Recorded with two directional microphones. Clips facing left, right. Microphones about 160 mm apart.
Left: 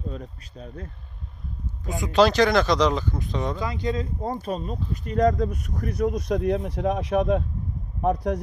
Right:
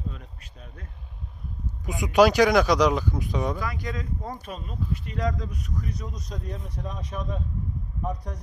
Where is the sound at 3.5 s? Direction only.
25° left (ahead or behind).